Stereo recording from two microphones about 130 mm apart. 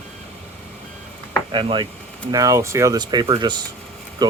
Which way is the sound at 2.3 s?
25° right (ahead or behind).